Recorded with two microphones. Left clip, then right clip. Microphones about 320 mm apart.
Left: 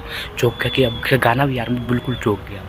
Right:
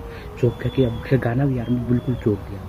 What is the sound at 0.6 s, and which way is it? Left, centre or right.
Speech, left.